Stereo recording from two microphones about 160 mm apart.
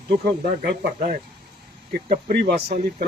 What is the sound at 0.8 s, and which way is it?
Speech, 50° right (ahead or behind).